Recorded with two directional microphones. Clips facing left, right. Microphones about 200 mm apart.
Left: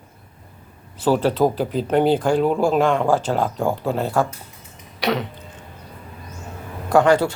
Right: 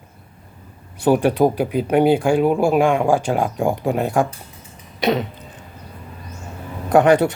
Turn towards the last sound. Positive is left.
turn(degrees=-20)  # may be behind; listen again after turning